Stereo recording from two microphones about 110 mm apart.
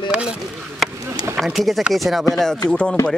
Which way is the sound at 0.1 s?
10° right (ahead or behind).